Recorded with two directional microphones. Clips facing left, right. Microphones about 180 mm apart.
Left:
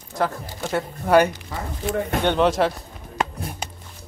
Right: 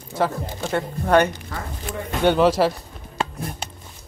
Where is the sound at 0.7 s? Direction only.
10° left (ahead or behind).